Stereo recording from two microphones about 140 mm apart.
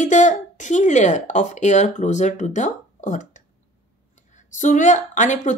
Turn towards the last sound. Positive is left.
turn(degrees=60)  # may be behind; listen again after turning